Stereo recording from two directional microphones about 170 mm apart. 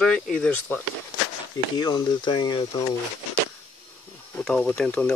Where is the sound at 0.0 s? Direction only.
5° left (ahead or behind).